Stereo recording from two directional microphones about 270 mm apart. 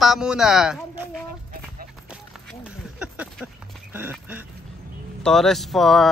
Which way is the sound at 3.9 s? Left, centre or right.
Centre.